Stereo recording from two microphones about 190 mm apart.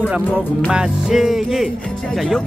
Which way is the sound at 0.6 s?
5° right (ahead or behind).